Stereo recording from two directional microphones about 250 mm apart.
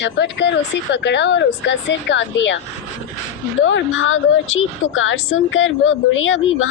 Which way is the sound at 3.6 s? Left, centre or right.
Left.